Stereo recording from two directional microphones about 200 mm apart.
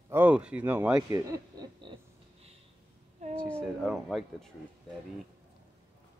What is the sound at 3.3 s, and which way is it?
Speech, 5° left (ahead or behind).